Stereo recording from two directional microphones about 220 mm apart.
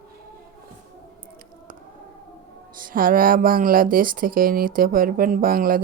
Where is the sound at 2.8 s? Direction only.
40° right (ahead or behind).